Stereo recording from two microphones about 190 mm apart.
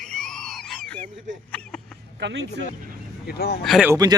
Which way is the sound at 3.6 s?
Centre (ahead or behind).